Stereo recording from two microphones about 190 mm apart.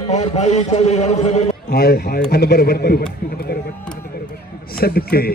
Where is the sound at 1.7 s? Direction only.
55° left (ahead or behind).